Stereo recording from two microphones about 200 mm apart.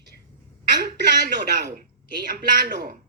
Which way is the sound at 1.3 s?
55° right (ahead or behind).